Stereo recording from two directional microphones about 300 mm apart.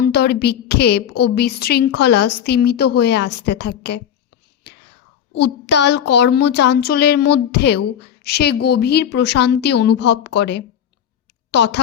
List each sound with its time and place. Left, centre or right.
0.0 s speech: left
5.4 s speech: left